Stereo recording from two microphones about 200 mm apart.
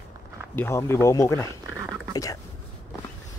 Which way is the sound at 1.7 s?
15° right (ahead or behind).